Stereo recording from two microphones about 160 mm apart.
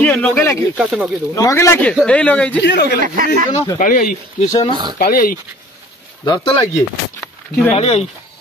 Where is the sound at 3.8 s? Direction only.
60° left (ahead or behind).